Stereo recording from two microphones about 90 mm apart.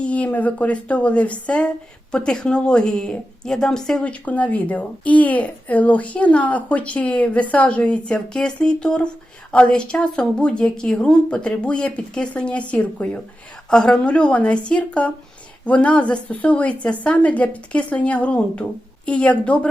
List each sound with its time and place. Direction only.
0.0 s a woman's voice: 15° left (ahead or behind)
4.0 s a woman's voice: 15° left (ahead or behind)